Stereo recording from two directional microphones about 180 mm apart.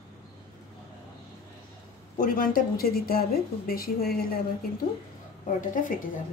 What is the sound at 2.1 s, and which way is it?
Speech, 50° left (ahead or behind).